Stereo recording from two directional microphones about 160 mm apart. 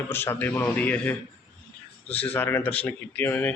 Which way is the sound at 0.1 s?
15° left (ahead or behind).